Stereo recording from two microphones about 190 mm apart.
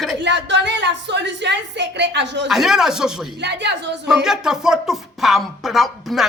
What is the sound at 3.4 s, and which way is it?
Speech, 65° right (ahead or behind).